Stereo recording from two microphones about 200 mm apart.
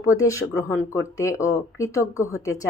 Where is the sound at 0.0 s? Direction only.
15° left (ahead or behind).